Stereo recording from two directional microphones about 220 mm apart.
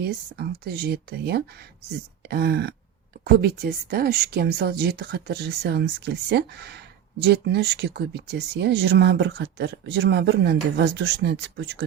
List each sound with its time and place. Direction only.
0.0 s speech: 45° right (ahead or behind)